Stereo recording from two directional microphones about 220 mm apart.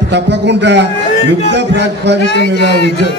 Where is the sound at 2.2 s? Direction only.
50° left (ahead or behind).